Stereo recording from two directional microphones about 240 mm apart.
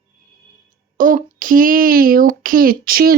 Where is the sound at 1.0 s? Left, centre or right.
Right.